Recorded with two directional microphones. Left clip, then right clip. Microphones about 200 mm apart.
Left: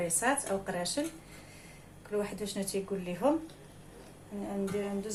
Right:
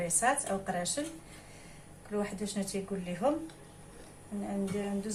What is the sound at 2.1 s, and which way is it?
A woman's voice, 25° left (ahead or behind).